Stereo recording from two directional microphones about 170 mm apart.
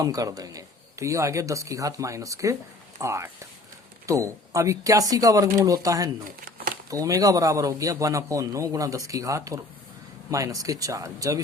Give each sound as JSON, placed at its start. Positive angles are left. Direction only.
{"t": 0.0, "sound": "a man's voice", "side_deg": -20}
{"t": 6.2, "sound": "crumpling", "side_deg": -55}
{"t": 6.9, "sound": "a man's voice", "side_deg": -20}